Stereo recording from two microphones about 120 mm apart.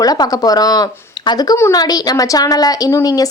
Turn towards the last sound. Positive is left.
turn(degrees=30)  # may be behind; listen again after turning